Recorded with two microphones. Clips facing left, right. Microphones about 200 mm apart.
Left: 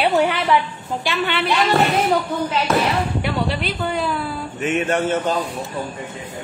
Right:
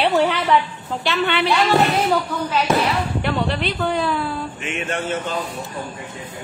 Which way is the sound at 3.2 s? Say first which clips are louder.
Right 1 dB; 5° left (ahead or behind).